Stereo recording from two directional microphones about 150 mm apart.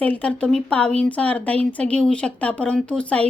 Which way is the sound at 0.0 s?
10° left (ahead or behind).